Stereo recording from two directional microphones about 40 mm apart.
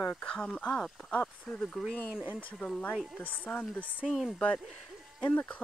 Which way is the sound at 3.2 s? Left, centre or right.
Left.